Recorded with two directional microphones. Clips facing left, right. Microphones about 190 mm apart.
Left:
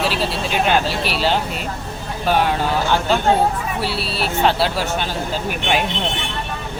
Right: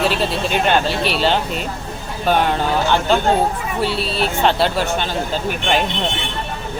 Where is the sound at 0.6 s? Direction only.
5° left (ahead or behind).